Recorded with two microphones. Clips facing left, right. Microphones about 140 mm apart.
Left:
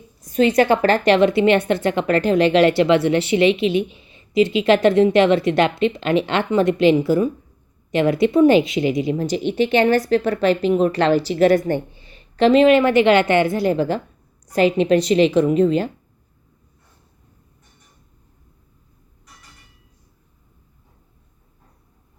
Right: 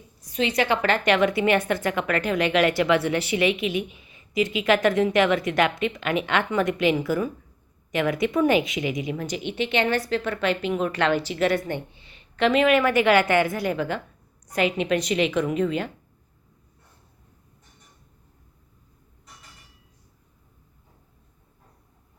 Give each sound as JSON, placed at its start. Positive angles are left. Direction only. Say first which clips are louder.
{"t": 0.2, "sound": "a woman's voice", "louder": "left 8 dB", "side_deg": 50}